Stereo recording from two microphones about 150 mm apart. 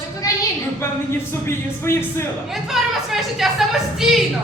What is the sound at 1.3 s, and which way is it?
Speech, 15° left (ahead or behind).